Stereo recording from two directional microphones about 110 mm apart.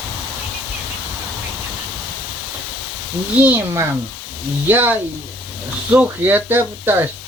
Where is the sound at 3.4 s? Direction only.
20° right (ahead or behind).